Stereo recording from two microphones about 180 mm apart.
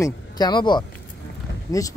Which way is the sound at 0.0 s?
25° left (ahead or behind).